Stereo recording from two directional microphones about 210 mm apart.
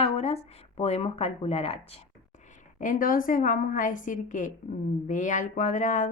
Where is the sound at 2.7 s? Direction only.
40° left (ahead or behind).